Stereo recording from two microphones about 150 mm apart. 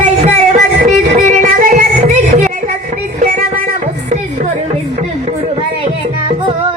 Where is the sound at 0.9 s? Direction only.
55° right (ahead or behind).